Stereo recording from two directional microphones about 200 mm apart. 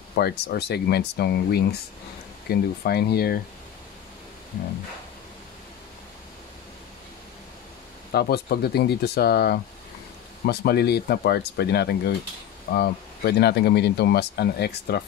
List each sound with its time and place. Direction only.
0.1 s speech: 55° left (ahead or behind)
8.1 s speech: 50° left (ahead or behind)